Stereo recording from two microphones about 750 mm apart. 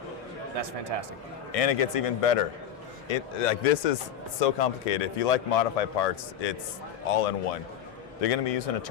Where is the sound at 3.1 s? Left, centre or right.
Left.